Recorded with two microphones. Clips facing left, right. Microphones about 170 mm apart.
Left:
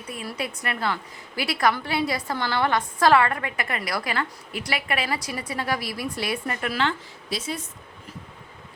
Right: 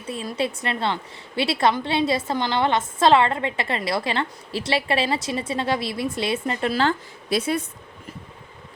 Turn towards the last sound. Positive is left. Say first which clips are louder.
# right 8 dB
turn(degrees=-60)  # may be behind; listen again after turning